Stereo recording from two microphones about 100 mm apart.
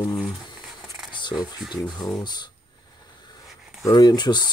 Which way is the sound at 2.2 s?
45° left (ahead or behind).